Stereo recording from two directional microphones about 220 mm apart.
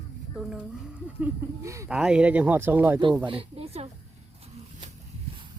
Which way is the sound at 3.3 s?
25° right (ahead or behind).